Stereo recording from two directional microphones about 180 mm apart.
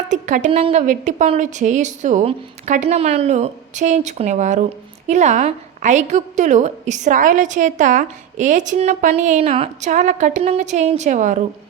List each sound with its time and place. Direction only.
0.1 s a woman's voice: 45° right (ahead or behind)